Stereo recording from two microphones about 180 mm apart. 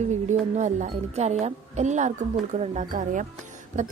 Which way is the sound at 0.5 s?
40° right (ahead or behind).